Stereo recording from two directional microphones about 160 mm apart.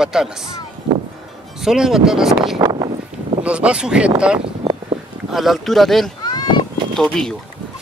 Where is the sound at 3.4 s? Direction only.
5° right (ahead or behind).